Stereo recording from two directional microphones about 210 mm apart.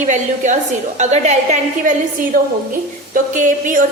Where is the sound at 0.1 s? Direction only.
35° right (ahead or behind).